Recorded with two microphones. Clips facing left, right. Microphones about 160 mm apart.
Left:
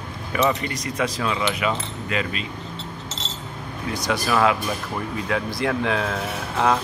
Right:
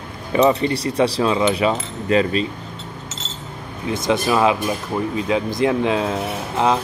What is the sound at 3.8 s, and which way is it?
Speech, 25° right (ahead or behind).